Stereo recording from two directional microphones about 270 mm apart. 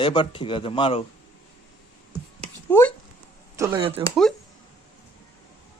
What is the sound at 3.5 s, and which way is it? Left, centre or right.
Speech, centre.